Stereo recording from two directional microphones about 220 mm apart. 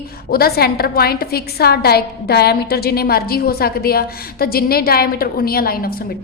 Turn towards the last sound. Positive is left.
turn(degrees=40)  # may be behind; listen again after turning